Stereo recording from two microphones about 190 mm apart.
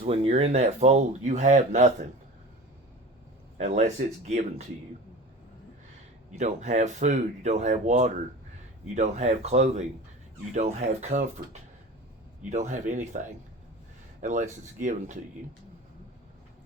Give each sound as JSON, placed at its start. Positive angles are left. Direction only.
{"t": 0.0, "sound": "speech", "side_deg": -30}
{"t": 3.6, "sound": "speech", "side_deg": -40}
{"t": 6.3, "sound": "speech", "side_deg": -40}
{"t": 12.5, "sound": "speech", "side_deg": -40}